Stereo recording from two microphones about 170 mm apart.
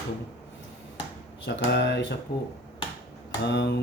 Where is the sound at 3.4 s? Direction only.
80° left.